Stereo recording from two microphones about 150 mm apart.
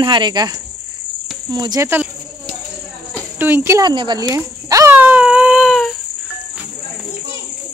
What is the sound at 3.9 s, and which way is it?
Speech, 30° right (ahead or behind).